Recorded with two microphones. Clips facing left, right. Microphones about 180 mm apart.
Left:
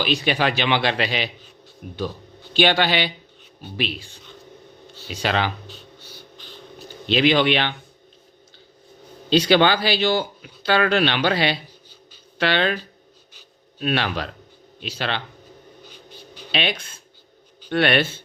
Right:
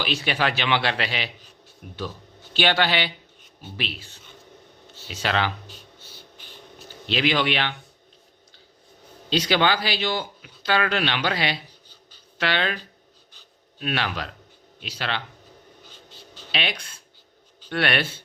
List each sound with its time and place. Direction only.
0.0 s a man's voice: 15° left (ahead or behind)
2.5 s a man's voice: 15° left (ahead or behind)
5.1 s a man's voice: 15° left (ahead or behind)
6.3 s a sound: 10° right (ahead or behind)
7.1 s speech: 25° left (ahead or behind)
9.3 s speech: 30° left (ahead or behind)
13.8 s speech: 30° left (ahead or behind)
16.5 s speech: 25° left (ahead or behind)